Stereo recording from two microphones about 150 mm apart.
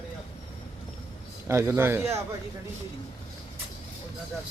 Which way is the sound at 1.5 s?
15° right (ahead or behind).